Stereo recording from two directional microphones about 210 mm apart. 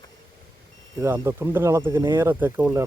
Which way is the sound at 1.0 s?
15° right (ahead or behind).